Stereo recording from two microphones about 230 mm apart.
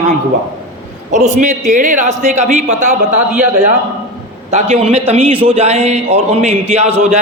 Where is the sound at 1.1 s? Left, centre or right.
Right.